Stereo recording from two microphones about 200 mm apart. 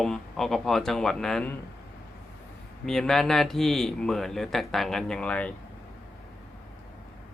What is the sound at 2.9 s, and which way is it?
Speech, centre (ahead or behind).